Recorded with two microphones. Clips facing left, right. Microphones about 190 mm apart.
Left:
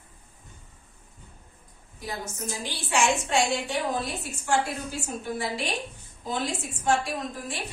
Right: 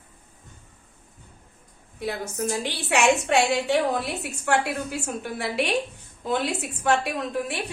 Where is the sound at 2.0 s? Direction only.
65° right (ahead or behind).